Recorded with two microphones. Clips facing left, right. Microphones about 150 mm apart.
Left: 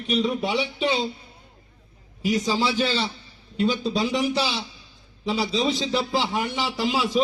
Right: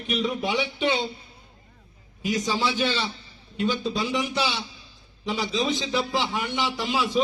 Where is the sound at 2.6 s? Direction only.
35° left (ahead or behind).